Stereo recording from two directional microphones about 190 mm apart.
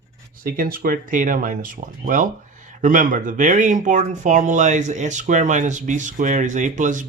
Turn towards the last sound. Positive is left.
turn(degrees=-40)  # may be behind; listen again after turning